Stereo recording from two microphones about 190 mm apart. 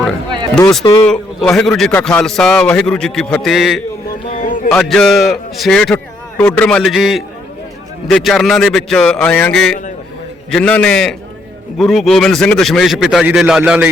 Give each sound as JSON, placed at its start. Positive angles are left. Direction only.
{"t": 1.0, "sound": "a man's voice", "side_deg": 5}
{"t": 4.4, "sound": "a sound", "side_deg": 45}
{"t": 4.7, "sound": "a man's voice", "side_deg": 5}